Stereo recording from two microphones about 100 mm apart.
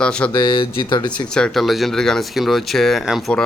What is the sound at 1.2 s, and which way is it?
Speech, 5° left (ahead or behind).